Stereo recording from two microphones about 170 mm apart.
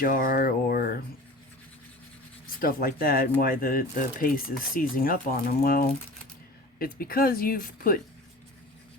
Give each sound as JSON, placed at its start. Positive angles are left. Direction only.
{"t": 0.0, "sound": "speech", "side_deg": 55}
{"t": 2.6, "sound": "speech", "side_deg": 60}